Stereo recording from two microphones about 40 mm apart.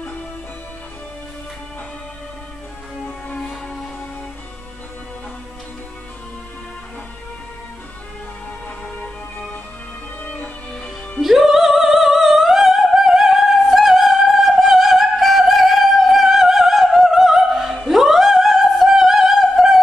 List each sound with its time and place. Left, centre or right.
8.8 s music: left
10.2 s music: left
11.1 s music: centre